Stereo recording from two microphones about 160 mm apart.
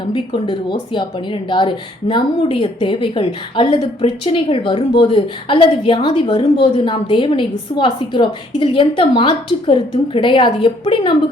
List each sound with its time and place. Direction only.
0.1 s a woman's voice: 30° left (ahead or behind)